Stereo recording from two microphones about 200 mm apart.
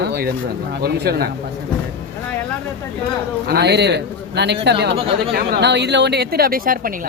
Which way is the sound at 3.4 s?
55° right (ahead or behind).